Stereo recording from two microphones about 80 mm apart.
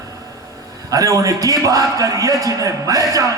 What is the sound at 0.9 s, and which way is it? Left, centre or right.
A man's voice, right.